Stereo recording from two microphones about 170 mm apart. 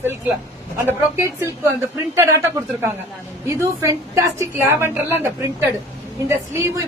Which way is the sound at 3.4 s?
15° right (ahead or behind).